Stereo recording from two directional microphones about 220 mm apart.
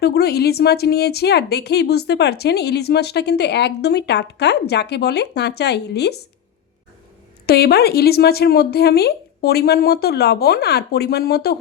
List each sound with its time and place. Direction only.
0.0 s a woman's voice: 45° left (ahead or behind)
7.4 s a woman's voice: 45° left (ahead or behind)